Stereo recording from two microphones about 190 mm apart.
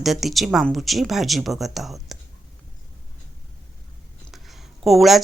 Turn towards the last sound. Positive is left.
turn(degrees=0)  # may be behind; listen again after turning